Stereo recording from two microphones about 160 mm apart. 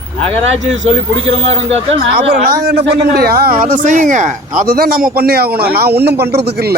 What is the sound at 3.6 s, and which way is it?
A man's voice, 55° right (ahead or behind).